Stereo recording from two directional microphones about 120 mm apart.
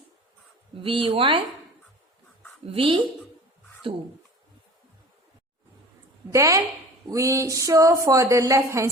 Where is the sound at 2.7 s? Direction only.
50° right (ahead or behind).